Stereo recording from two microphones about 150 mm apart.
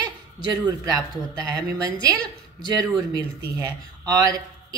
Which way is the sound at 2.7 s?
25° right (ahead or behind).